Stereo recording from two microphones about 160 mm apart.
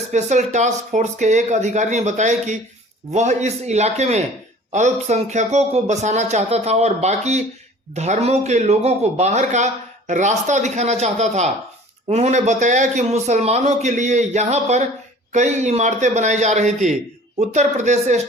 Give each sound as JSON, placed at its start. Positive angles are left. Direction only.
{"t": 0.1, "sound": "a man's voice", "side_deg": -50}